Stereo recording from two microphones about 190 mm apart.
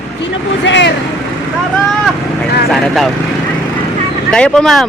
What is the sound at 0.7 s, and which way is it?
Speech, 70° left (ahead or behind).